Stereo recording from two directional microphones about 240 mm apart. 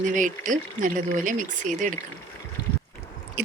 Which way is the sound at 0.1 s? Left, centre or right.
Right.